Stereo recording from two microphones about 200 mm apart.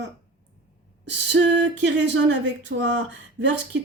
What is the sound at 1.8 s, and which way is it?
Speech, 65° right (ahead or behind).